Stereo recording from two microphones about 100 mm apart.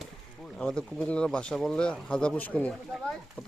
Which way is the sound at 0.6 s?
10° left (ahead or behind).